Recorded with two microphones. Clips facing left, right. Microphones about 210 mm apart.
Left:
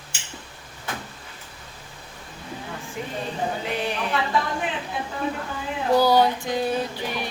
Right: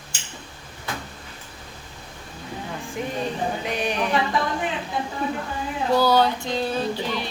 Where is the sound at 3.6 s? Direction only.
15° right (ahead or behind).